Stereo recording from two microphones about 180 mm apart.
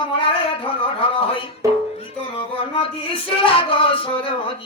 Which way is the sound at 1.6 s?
15° right (ahead or behind).